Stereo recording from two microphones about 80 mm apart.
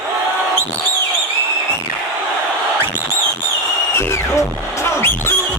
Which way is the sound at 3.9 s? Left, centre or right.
Left.